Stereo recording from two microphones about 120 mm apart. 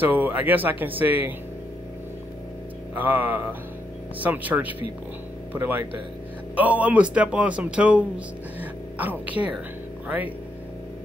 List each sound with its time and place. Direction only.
0.0 s speech: 15° right (ahead or behind)
2.9 s speech: 15° right (ahead or behind)